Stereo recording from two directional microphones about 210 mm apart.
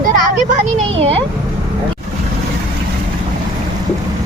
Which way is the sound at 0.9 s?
30° right (ahead or behind).